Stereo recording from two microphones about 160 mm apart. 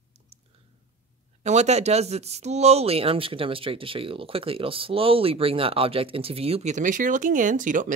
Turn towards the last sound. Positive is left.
turn(degrees=-55)  # may be behind; listen again after turning